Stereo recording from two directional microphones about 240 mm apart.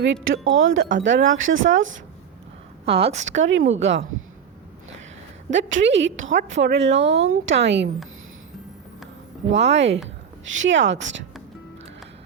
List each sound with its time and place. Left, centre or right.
0.0 s a woman's voice: right
2.8 s a woman's voice: right
3.2 s a woman's voice: right
5.5 s a woman's voice: right
9.6 s a woman's voice: right